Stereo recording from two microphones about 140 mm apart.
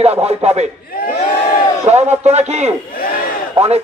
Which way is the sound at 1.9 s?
50° right (ahead or behind).